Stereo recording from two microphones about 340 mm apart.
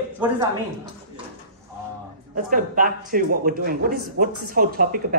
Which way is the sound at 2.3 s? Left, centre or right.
Right.